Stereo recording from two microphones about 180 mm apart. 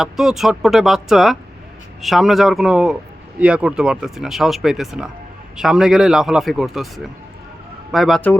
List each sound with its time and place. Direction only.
0.0 s a man's voice: centre (ahead or behind)